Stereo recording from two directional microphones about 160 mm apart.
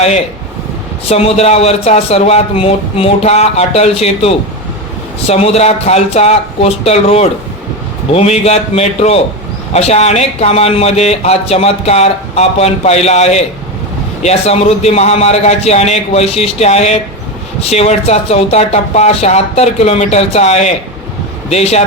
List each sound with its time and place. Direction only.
1.0 s speech: 40° left (ahead or behind)